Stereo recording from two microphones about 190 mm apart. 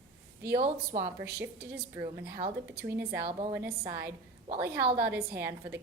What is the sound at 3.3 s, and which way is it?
Speech, 30° right (ahead or behind).